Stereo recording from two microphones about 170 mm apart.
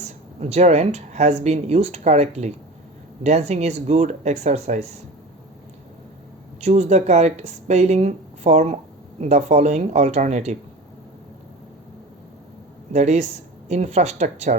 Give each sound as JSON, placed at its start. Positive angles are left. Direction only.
{"t": 0.3, "sound": "a woman's voice", "side_deg": -40}
{"t": 6.6, "sound": "a woman's voice", "side_deg": -40}
{"t": 12.9, "sound": "a woman's voice", "side_deg": -40}